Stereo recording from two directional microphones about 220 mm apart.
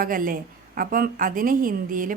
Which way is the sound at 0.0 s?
40° right (ahead or behind).